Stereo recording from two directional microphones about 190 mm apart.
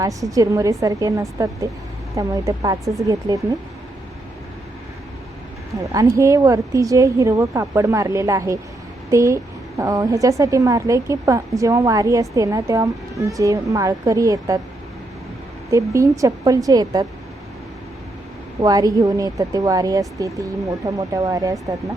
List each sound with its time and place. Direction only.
0.0 s a woman's voice: 15° right (ahead or behind)
5.8 s a woman's voice: 15° right (ahead or behind)
15.7 s a woman's voice: 15° right (ahead or behind)
18.6 s speech: 20° right (ahead or behind)